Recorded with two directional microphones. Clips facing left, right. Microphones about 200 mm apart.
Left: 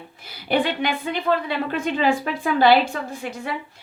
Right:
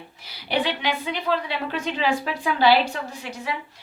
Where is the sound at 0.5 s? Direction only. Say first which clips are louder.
Left 3 dB; 50° left (ahead or behind).